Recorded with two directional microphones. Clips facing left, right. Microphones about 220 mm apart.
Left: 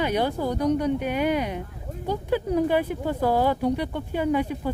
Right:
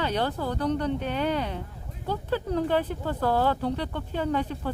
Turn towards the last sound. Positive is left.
turn(degrees=10)  # may be behind; listen again after turning